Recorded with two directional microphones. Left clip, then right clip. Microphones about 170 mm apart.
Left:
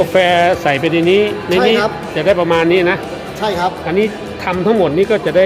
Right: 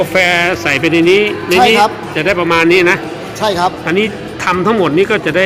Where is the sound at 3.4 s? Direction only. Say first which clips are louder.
Right 3 dB; 25° right (ahead or behind).